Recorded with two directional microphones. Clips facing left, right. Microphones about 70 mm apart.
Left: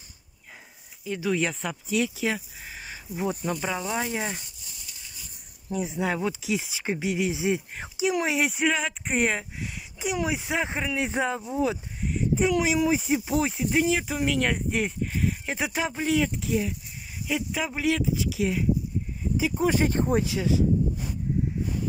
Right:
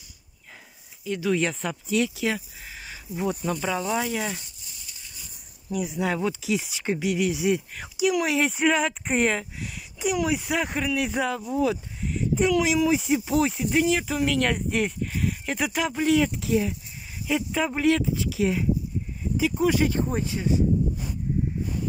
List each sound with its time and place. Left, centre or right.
1.0 s speech: centre
5.7 s speech: left
6.0 s speech: centre
8.4 s speech: centre
9.6 s speech: centre
19.3 s speech: left
20.4 s speech: left